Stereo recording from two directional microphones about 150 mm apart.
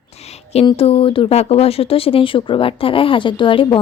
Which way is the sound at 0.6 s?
35° left (ahead or behind).